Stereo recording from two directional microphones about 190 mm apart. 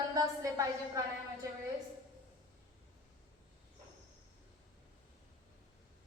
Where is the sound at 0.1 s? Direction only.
15° right (ahead or behind).